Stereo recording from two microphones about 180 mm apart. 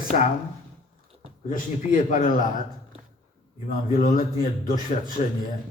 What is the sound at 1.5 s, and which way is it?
Speech, 45° left (ahead or behind).